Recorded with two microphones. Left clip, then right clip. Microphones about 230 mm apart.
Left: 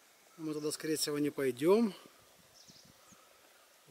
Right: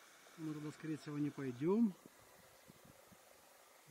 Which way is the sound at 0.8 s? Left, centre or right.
Centre.